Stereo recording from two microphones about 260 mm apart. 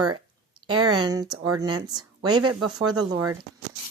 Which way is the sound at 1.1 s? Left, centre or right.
Centre.